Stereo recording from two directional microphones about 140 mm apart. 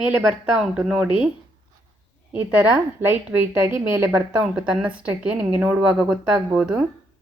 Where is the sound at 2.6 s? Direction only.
5° right (ahead or behind).